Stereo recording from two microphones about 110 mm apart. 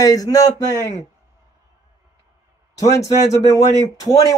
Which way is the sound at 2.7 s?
30° left (ahead or behind).